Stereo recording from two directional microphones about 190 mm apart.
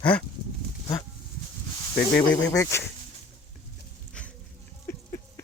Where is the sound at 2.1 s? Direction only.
15° left (ahead or behind).